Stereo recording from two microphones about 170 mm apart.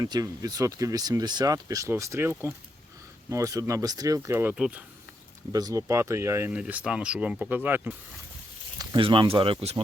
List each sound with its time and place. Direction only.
0.0 s speech: 20° right (ahead or behind)
4.5 s speech: 5° right (ahead or behind)
5.5 s speech: 20° right (ahead or behind)
8.8 s speech: 25° right (ahead or behind)